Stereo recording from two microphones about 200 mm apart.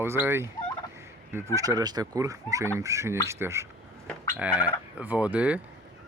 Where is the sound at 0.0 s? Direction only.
10° right (ahead or behind).